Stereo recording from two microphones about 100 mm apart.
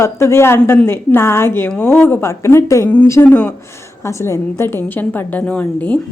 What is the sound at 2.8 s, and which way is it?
Speech, 15° left (ahead or behind).